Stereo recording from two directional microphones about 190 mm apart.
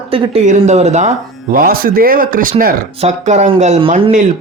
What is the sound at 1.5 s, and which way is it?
Speech, 50° right (ahead or behind).